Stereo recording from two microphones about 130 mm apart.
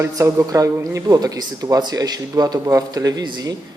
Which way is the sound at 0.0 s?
25° right (ahead or behind).